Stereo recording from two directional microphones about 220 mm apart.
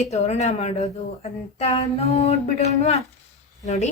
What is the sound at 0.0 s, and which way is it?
Speech, 30° left (ahead or behind).